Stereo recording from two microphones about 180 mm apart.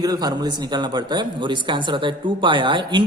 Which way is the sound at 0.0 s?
20° right (ahead or behind).